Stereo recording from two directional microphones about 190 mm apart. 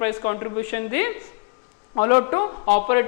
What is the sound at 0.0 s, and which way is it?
A woman's voice, 15° left (ahead or behind).